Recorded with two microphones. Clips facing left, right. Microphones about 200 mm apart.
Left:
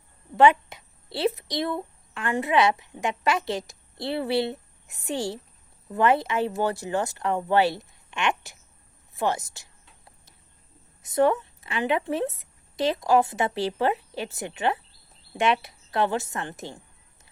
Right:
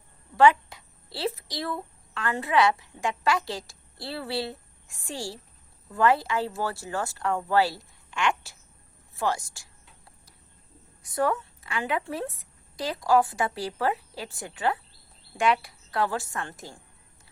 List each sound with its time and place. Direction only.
0.3 s a child's voice: 20° left (ahead or behind)
11.0 s a woman's voice: 20° left (ahead or behind)